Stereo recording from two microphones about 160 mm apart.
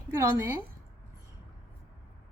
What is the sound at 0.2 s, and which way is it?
Speech, 15° right (ahead or behind).